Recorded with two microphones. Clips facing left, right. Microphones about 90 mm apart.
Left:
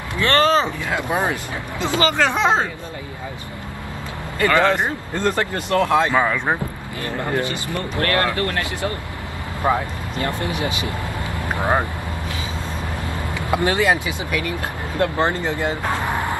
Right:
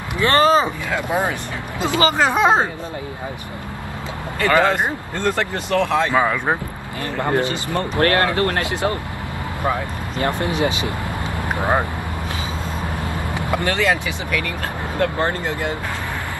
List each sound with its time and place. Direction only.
0.2 s speech: 15° right (ahead or behind)
2.0 s speech: 15° right (ahead or behind)
4.5 s speech: 15° right (ahead or behind)
5.1 s speech: 10° left (ahead or behind)
6.1 s speech: 10° right (ahead or behind)
7.3 s speech: 25° right (ahead or behind)
9.6 s speech: 25° left (ahead or behind)
10.1 s speech: 25° right (ahead or behind)
11.3 s vehicle: 20° right (ahead or behind)
13.5 s speech: 15° left (ahead or behind)